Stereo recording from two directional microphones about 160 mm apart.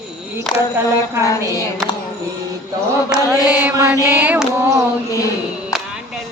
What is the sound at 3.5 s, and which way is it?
Mantra, 10° right (ahead or behind).